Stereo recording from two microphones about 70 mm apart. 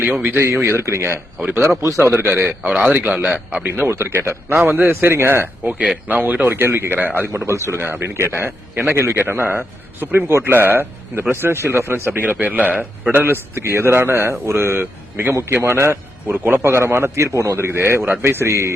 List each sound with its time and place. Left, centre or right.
0.0 s speech: right
0.3 s a man's voice: right
2.6 s a man's voice: centre
2.9 s a man's voice: right
5.7 s speech: centre
7.5 s speech: right
7.8 s a man's voice: right
13.1 s a man's voice: right